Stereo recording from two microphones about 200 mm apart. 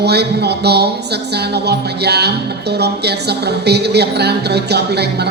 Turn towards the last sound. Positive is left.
turn(degrees=-55)  # may be behind; listen again after turning